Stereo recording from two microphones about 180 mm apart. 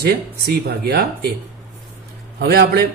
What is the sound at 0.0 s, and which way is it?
A man's voice, 60° right (ahead or behind).